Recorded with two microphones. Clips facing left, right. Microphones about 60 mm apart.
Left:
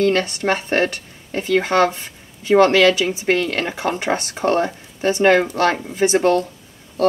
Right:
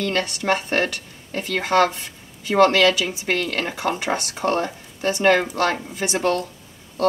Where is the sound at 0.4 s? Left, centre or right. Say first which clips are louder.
Left 2 dB; left.